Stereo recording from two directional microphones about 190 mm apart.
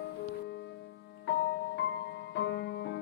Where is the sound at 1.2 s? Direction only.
65° left (ahead or behind).